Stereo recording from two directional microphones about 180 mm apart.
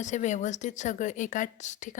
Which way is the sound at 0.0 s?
40° left (ahead or behind).